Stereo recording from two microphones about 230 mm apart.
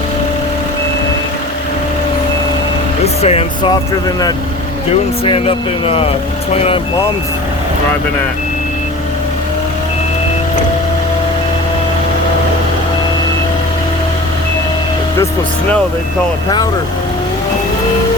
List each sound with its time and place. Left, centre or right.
3.2 s speech: left
4.9 s speech: left